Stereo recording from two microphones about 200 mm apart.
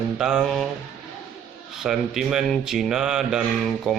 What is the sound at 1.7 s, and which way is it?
Speech, centre (ahead or behind).